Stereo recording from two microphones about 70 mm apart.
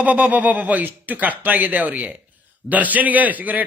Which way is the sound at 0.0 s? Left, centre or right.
Right.